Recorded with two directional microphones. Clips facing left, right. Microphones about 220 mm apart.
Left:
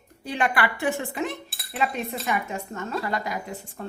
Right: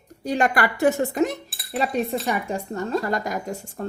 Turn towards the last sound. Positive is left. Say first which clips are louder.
# right 4 dB
turn(degrees=-45)  # may be behind; listen again after turning